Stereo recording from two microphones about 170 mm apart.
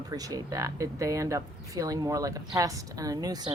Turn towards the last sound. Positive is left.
turn(degrees=-25)  # may be behind; listen again after turning